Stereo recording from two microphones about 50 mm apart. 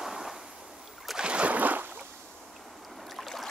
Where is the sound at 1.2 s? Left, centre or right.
Right.